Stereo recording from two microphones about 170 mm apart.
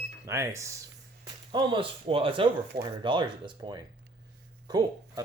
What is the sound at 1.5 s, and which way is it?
Speech, 30° right (ahead or behind).